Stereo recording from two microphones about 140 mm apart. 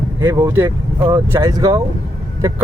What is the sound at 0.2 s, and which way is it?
Speech, 15° right (ahead or behind).